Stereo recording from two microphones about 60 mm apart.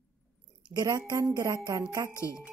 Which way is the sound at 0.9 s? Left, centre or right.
Right.